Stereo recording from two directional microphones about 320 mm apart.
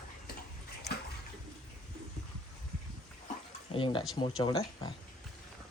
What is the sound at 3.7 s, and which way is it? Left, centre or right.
Speech, centre.